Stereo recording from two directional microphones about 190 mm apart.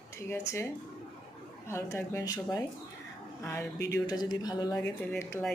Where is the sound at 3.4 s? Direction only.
15° left (ahead or behind).